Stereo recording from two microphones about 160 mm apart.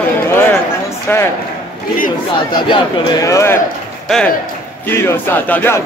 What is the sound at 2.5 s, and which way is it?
A man's voice, 30° left (ahead or behind).